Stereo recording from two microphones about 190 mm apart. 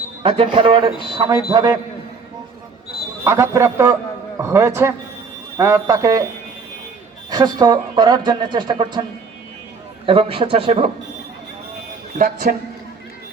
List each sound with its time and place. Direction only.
0.2 s speech: 30° right (ahead or behind)
3.2 s speech: 15° right (ahead or behind)
7.3 s speech: 20° right (ahead or behind)
10.1 s speech: 30° right (ahead or behind)
12.2 s speech: 50° right (ahead or behind)